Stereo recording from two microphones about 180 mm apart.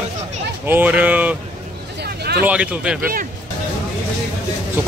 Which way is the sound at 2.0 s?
60° right (ahead or behind).